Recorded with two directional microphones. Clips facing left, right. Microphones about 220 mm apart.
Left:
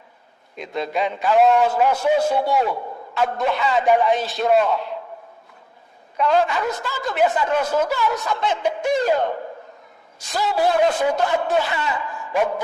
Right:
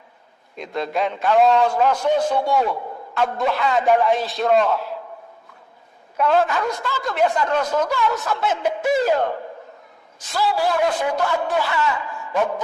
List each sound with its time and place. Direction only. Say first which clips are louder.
0.5 s a man's voice: even; centre (ahead or behind)
6.1 s speech: even; centre (ahead or behind)
10.3 s speech: left 1 dB; 20° left (ahead or behind)